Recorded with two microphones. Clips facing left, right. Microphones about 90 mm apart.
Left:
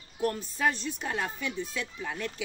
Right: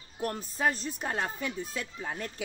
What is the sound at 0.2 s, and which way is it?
Speech, 40° right (ahead or behind).